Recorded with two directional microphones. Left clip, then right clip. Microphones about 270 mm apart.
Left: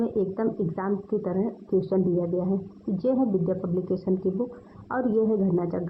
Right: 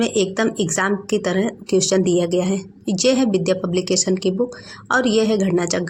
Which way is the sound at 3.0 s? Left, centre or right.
Right.